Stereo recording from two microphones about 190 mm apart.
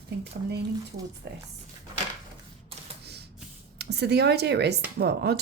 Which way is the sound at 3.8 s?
60° right (ahead or behind).